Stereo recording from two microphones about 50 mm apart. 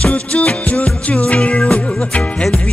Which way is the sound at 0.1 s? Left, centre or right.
Left.